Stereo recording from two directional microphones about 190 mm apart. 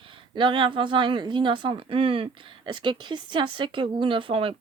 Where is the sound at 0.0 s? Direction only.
25° right (ahead or behind).